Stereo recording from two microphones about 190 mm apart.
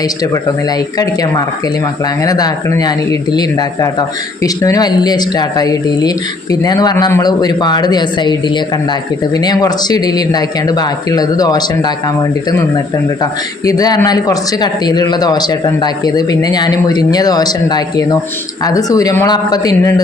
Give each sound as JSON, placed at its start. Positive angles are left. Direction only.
{"t": 0.7, "sound": "speech", "side_deg": 20}